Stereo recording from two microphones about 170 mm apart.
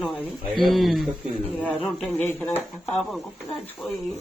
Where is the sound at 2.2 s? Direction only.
15° left (ahead or behind).